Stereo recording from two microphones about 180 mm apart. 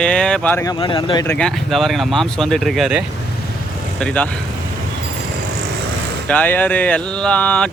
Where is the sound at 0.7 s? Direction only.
25° left (ahead or behind).